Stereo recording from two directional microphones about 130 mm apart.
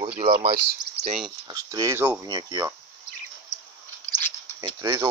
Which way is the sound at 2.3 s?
30° right (ahead or behind).